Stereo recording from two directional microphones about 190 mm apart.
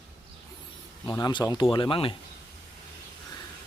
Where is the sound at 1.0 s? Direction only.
20° left (ahead or behind).